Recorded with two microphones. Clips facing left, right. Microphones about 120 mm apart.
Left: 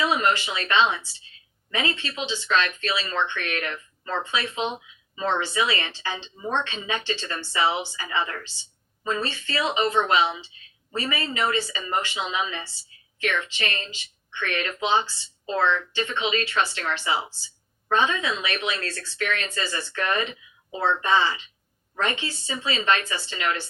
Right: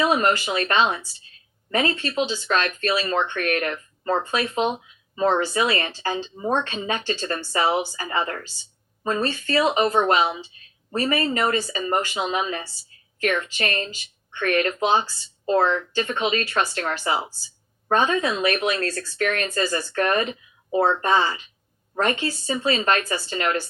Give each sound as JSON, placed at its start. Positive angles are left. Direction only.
{"t": 0.0, "sound": "speech", "side_deg": -45}